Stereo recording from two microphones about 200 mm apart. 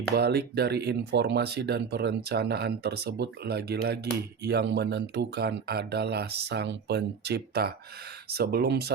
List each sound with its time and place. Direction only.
0.1 s speech: 55° right (ahead or behind)